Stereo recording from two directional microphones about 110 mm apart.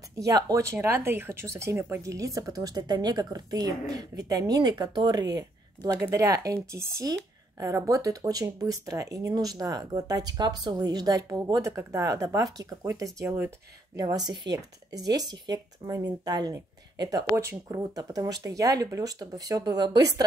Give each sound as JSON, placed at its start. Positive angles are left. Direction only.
{"t": 0.2, "sound": "speech", "side_deg": -35}
{"t": 13.9, "sound": "speech", "side_deg": -35}